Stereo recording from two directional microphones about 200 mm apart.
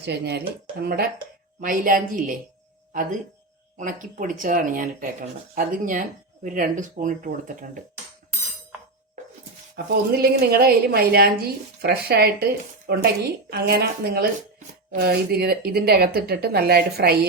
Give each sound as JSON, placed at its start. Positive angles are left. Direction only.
{"t": 0.0, "sound": "speech", "side_deg": -55}
{"t": 1.6, "sound": "a woman's voice", "side_deg": -45}
{"t": 9.7, "sound": "a woman's voice", "side_deg": -50}